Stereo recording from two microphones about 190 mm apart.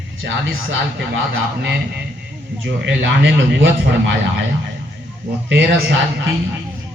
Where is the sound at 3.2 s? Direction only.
70° right (ahead or behind).